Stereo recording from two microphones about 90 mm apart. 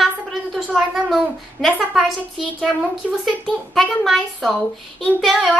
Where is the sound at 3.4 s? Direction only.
Centre (ahead or behind).